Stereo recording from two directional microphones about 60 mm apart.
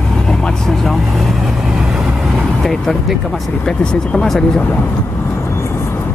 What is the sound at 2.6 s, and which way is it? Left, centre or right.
Speech, centre.